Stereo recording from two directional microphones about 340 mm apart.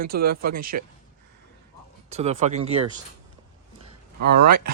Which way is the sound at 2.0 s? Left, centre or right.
Centre.